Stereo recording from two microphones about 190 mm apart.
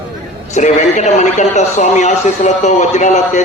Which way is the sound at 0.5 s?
40° left (ahead or behind).